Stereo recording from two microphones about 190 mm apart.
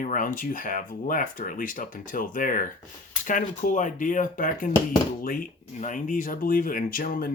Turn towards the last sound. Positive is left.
turn(degrees=50)  # may be behind; listen again after turning